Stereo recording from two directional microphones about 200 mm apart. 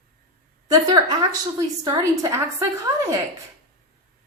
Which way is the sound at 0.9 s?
20° right (ahead or behind).